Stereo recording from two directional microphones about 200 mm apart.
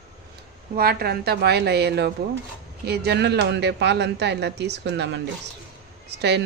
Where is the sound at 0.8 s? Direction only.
50° right (ahead or behind).